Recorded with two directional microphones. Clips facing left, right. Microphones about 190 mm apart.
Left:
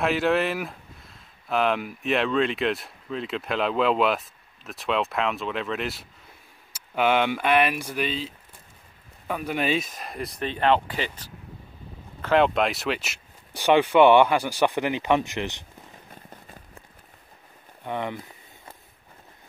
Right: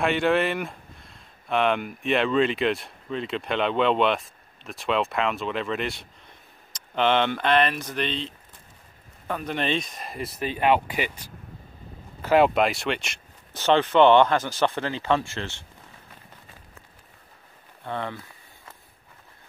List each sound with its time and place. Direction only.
0.0 s speech: centre (ahead or behind)
9.3 s speech: 10° left (ahead or behind)
17.8 s speech: 15° left (ahead or behind)